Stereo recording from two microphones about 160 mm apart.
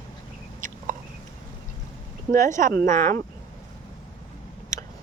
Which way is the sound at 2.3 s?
55° right (ahead or behind).